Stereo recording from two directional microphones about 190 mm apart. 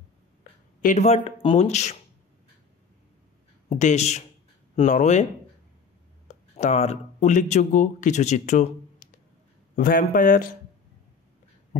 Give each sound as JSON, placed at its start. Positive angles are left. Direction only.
{"t": 0.4, "sound": "speech", "side_deg": 45}
{"t": 3.6, "sound": "speech", "side_deg": 40}
{"t": 6.2, "sound": "speech", "side_deg": 40}